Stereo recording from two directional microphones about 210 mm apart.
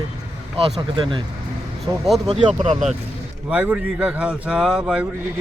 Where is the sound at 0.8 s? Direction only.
20° right (ahead or behind).